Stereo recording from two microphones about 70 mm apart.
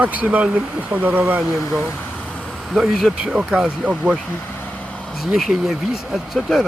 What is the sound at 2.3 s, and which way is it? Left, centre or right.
Vehicle, centre.